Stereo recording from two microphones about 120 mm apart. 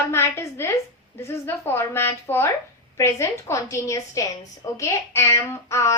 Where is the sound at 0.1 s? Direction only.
20° left (ahead or behind).